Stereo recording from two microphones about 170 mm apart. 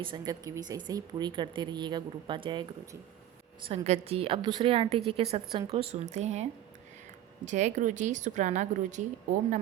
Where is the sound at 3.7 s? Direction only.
40° right (ahead or behind).